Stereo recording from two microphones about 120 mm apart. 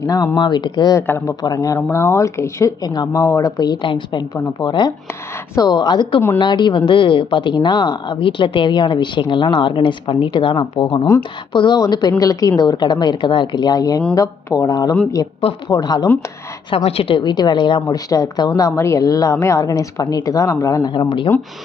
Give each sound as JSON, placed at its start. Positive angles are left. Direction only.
{"t": 0.0, "sound": "speech", "side_deg": 30}
{"t": 1.0, "sound": "speech", "side_deg": 20}
{"t": 1.4, "sound": "a woman's voice", "side_deg": 30}
{"t": 16.6, "sound": "a woman's voice", "side_deg": 55}
{"t": 17.8, "sound": "speech", "side_deg": 30}